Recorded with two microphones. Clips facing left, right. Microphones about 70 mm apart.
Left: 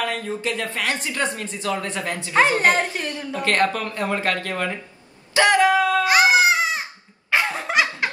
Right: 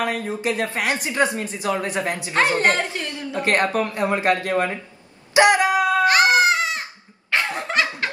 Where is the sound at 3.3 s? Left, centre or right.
Right.